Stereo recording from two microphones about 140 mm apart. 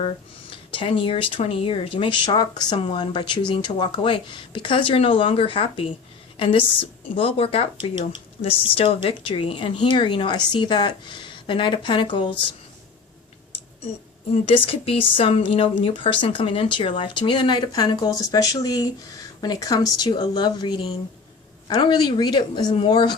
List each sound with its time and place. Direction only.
0.5 s speech: 40° left (ahead or behind)
14.4 s speech: 40° left (ahead or behind)